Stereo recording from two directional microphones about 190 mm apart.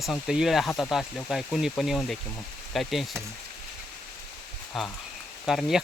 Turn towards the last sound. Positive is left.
turn(degrees=0)  # may be behind; listen again after turning